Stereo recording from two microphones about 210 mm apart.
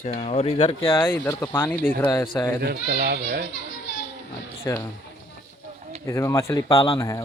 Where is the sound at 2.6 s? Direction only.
50° right (ahead or behind).